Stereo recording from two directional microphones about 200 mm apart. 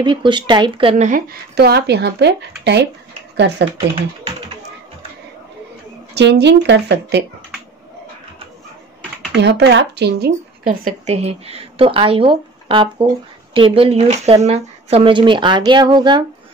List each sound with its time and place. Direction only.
0.0 s a woman's voice: 25° right (ahead or behind); by 3.6 s 60° right (ahead or behind)
6.1 s speech: 60° right (ahead or behind)
9.3 s speech: 60° right (ahead or behind); by 11.1 s 45° right (ahead or behind)
11.2 s speech: 30° right (ahead or behind)